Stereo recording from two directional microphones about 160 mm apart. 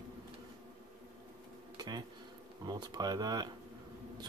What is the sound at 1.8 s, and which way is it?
Speech, 25° right (ahead or behind).